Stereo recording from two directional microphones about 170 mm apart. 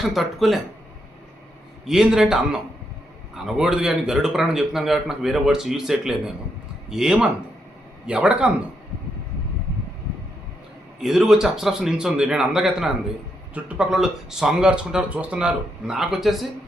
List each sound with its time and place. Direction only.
0.0 s a man's voice: centre (ahead or behind)
1.9 s a man's voice: 5° right (ahead or behind)
11.0 s a man's voice: centre (ahead or behind)